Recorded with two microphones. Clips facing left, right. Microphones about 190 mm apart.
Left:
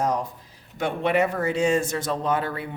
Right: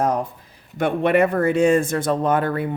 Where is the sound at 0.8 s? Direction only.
55° right (ahead or behind).